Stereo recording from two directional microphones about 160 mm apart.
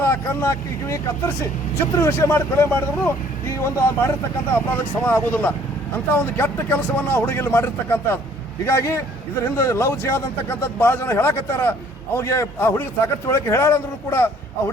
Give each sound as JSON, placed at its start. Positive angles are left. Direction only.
{"t": 0.0, "sound": "speech", "side_deg": 15}
{"t": 2.0, "sound": "speech", "side_deg": 15}